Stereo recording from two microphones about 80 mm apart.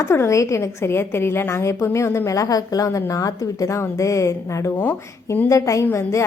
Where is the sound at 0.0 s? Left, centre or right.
Left.